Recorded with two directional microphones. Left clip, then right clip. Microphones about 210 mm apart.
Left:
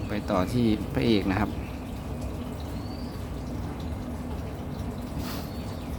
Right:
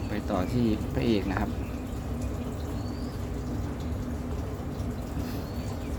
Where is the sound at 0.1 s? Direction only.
15° left (ahead or behind).